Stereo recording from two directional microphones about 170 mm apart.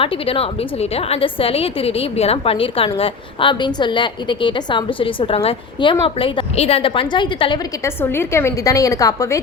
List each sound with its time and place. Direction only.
0.0 s a woman's voice: 35° left (ahead or behind)
7.9 s a woman's voice: 15° left (ahead or behind)